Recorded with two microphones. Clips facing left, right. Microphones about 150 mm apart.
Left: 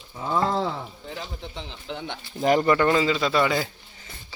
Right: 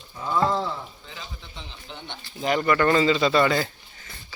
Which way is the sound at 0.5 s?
55° left (ahead or behind).